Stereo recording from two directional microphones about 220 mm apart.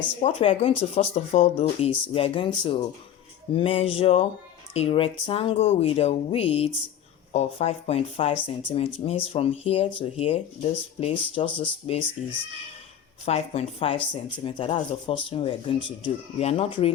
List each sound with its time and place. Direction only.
0.0 s speech: 25° left (ahead or behind)